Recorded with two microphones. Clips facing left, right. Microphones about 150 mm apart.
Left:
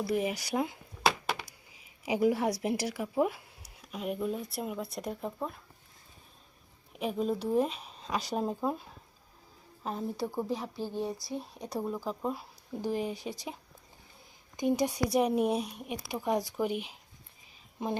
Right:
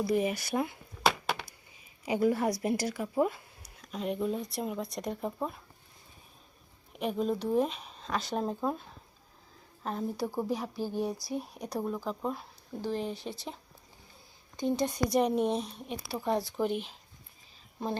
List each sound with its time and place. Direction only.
0.0 s speech: 5° left (ahead or behind)
1.0 s a sound: centre (ahead or behind)
2.0 s speech: 10° left (ahead or behind)
6.9 s speech: centre (ahead or behind)
14.5 s speech: 15° left (ahead or behind)